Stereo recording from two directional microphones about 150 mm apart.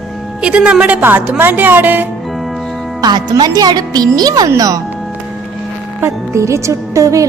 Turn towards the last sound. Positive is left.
turn(degrees=-20)  # may be behind; listen again after turning